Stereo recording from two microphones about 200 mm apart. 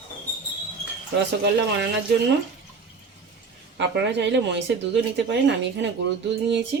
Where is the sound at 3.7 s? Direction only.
60° right (ahead or behind).